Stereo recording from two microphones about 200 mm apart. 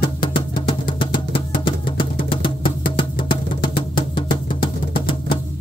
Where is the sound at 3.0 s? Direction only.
25° left (ahead or behind).